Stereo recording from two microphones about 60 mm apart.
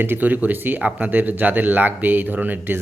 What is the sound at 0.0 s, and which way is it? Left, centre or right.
Speech, right.